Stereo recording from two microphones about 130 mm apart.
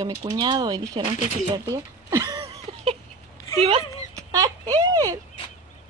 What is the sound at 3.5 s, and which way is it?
Speech, 45° right (ahead or behind).